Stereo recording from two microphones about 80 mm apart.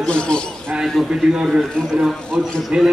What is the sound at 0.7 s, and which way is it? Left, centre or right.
A man's voice, centre.